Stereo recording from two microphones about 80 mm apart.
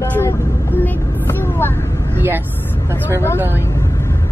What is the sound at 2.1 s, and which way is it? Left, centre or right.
Vehicle, right.